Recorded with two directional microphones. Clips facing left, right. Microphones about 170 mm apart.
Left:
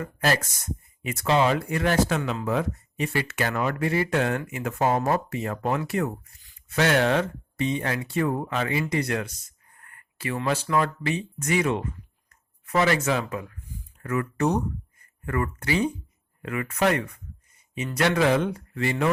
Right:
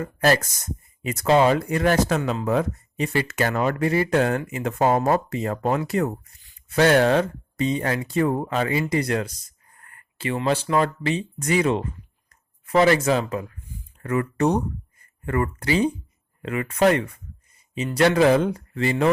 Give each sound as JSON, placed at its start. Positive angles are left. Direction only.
{"t": 0.0, "sound": "speech", "side_deg": -40}
{"t": 12.3, "sound": "a sound", "side_deg": -30}
{"t": 13.1, "sound": "speech", "side_deg": -35}